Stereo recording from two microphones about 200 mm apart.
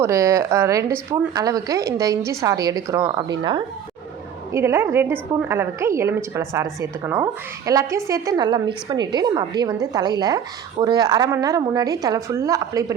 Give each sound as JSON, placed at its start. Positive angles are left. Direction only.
{"t": 0.0, "sound": "a woman's voice", "side_deg": -15}